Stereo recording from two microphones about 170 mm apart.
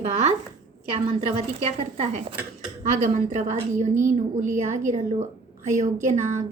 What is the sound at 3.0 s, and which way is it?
A woman's voice, 50° right (ahead or behind).